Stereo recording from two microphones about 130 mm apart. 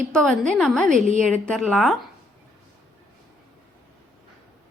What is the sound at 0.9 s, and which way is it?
Speech, 75° right (ahead or behind).